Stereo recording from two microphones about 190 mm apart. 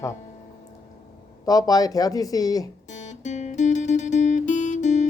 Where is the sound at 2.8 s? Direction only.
40° left (ahead or behind).